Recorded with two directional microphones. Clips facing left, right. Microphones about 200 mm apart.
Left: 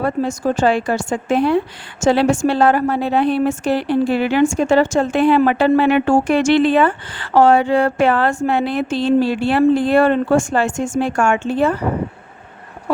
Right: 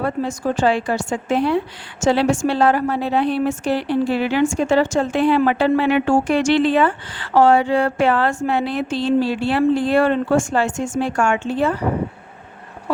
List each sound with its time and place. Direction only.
0.0 s a woman's voice: 45° left (ahead or behind)